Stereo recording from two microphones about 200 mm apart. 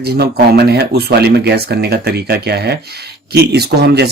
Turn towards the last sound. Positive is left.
turn(degrees=-55)  # may be behind; listen again after turning